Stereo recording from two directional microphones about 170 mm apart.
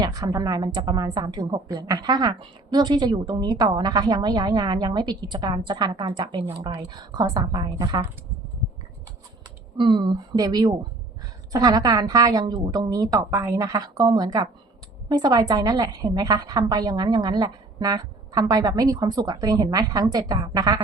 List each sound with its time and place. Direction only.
0.0 s a woman's voice: 20° right (ahead or behind)
9.7 s a woman's voice: 30° right (ahead or behind)